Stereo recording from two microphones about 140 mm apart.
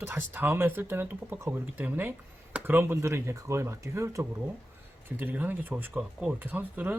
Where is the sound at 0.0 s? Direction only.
15° right (ahead or behind).